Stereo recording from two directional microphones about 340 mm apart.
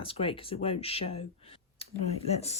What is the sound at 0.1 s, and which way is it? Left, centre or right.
Speech, centre.